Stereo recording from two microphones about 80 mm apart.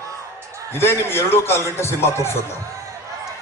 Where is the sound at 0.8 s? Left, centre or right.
Left.